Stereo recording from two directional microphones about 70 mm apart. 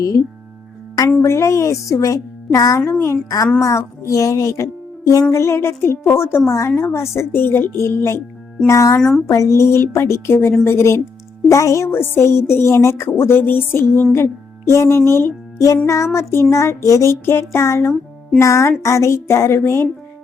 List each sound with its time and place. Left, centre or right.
1.2 s speech: left
2.8 s a woman's voice: left
3.2 s a woman's voice: left
3.6 s a woman's voice: left
9.0 s speech: centre
9.2 s a woman's voice: left
16.1 s a woman's voice: left